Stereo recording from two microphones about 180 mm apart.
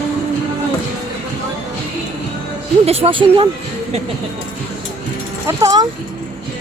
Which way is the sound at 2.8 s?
35° right (ahead or behind).